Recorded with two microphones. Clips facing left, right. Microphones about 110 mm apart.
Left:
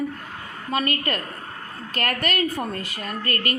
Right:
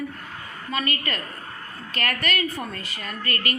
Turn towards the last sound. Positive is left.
turn(degrees=45)  # may be behind; listen again after turning